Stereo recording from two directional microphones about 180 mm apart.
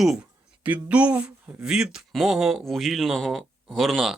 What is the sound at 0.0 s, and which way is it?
Speech, 5° right (ahead or behind).